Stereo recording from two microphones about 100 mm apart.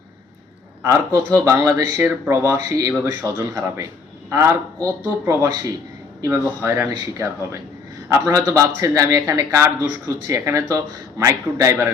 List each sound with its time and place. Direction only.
0.8 s a man's voice: 30° right (ahead or behind)